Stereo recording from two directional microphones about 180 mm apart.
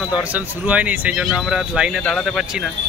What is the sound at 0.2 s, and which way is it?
Speech, 10° right (ahead or behind).